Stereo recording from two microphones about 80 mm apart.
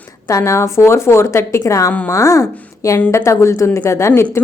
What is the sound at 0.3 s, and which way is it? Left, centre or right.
A woman's voice, left.